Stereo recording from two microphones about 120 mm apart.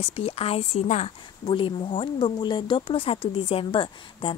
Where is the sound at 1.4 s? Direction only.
45° left (ahead or behind).